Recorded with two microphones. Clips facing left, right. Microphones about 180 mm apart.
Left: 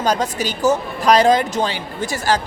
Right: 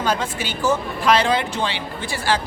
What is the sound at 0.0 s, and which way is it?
A woman's voice, 40° left (ahead or behind).